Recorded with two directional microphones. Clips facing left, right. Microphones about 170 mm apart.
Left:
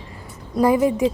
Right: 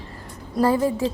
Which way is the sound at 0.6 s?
15° left (ahead or behind).